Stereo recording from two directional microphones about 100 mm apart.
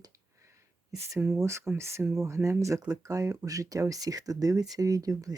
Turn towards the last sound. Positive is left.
turn(degrees=-35)  # may be behind; listen again after turning